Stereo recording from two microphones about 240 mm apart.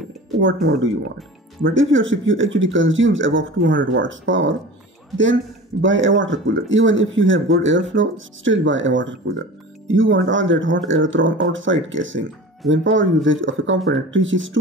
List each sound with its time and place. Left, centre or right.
0.4 s speech: right